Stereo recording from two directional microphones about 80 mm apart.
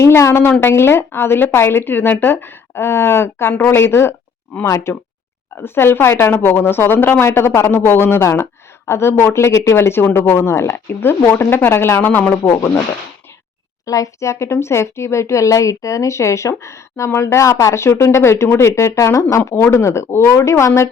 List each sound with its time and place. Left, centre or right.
0.0 s a woman's voice: left
12.5 s speech: left
13.8 s speech: left